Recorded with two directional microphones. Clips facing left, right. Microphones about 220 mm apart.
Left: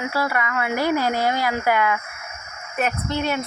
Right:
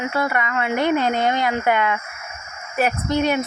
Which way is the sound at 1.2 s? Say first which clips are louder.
Right 2 dB; 5° left (ahead or behind).